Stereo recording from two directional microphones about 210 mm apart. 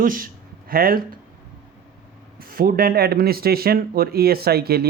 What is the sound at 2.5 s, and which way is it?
Speech, 40° right (ahead or behind).